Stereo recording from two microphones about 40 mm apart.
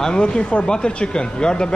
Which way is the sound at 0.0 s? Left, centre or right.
Left.